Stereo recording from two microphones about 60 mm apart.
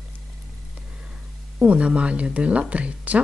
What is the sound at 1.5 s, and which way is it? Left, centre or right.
Speech, right.